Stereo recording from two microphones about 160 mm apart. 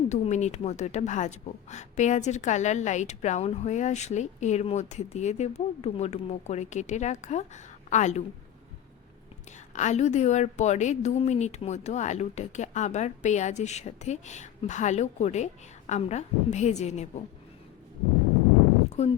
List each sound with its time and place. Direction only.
0.1 s speech: 45° left (ahead or behind)
9.7 s speech: 45° left (ahead or behind)
18.9 s a sound: 40° left (ahead or behind)